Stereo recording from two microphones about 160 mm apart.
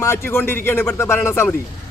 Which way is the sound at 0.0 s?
15° left (ahead or behind).